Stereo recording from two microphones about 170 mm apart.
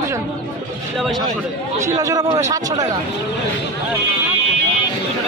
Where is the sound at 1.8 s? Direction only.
20° right (ahead or behind).